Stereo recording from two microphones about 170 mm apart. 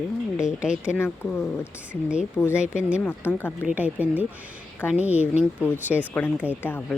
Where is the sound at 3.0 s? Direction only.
10° left (ahead or behind).